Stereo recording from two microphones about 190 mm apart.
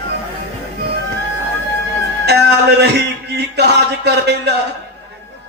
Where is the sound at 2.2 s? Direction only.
60° right (ahead or behind).